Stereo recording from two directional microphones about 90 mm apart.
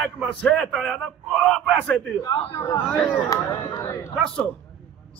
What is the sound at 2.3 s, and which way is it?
Speech, 45° left (ahead or behind).